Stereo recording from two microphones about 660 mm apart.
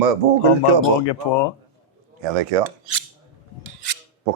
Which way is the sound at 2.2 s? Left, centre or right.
Right.